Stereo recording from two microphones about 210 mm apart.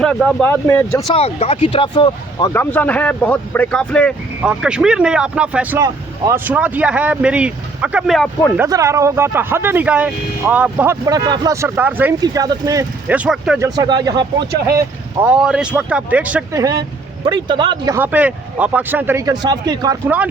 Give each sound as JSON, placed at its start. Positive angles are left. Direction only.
{"t": 0.0, "sound": "speech", "side_deg": 5}
{"t": 1.0, "sound": "speech", "side_deg": 30}
{"t": 2.5, "sound": "speech", "side_deg": 10}
{"t": 8.5, "sound": "speech", "side_deg": -15}
{"t": 13.6, "sound": "speech", "side_deg": -20}
{"t": 15.2, "sound": "speech", "side_deg": -5}
{"t": 16.6, "sound": "speech", "side_deg": -15}